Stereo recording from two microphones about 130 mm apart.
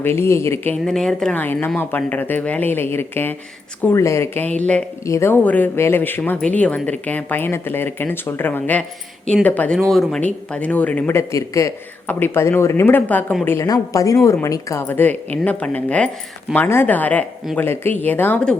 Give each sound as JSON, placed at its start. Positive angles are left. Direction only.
{"t": 0.0, "sound": "speech", "side_deg": 20}
{"t": 0.9, "sound": "speech", "side_deg": 5}
{"t": 5.0, "sound": "speech", "side_deg": 20}
{"t": 9.7, "sound": "speech", "side_deg": 0}
{"t": 13.7, "sound": "speech", "side_deg": 25}